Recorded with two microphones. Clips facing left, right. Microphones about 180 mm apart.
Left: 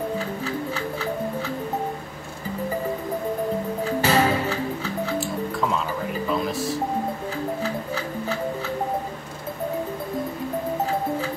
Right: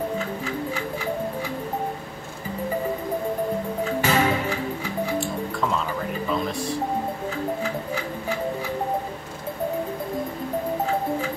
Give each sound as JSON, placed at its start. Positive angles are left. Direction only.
{"t": 4.0, "sound": "music", "side_deg": 35}
{"t": 4.5, "sound": "music", "side_deg": -15}
{"t": 5.2, "sound": "music", "side_deg": 0}
{"t": 7.6, "sound": "music", "side_deg": -15}